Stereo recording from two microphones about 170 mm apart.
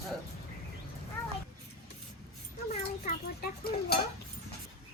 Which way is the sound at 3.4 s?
65° left (ahead or behind).